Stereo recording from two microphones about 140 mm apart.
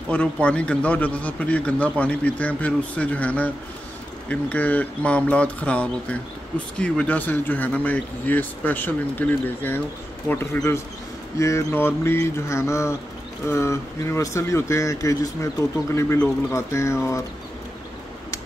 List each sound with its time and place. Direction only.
0.1 s a man's voice: 10° left (ahead or behind)